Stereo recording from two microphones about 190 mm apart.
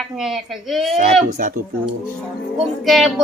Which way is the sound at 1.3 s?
50° right (ahead or behind).